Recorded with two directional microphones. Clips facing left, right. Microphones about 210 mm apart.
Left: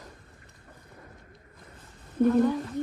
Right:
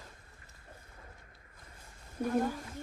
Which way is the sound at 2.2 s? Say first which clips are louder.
Left 10 dB; 55° left (ahead or behind).